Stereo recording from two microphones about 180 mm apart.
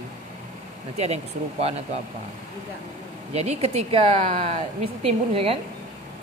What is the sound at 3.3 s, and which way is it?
A woman's voice, 35° right (ahead or behind).